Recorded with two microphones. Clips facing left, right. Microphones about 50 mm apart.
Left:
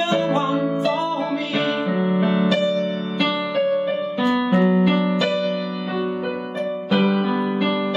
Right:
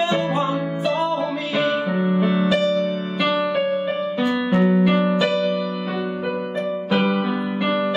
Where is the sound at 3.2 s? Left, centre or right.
Centre.